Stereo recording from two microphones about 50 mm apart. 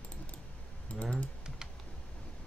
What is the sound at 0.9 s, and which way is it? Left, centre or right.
Speech, left.